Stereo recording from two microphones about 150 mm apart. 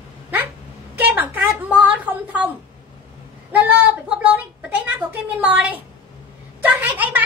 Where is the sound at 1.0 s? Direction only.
10° right (ahead or behind).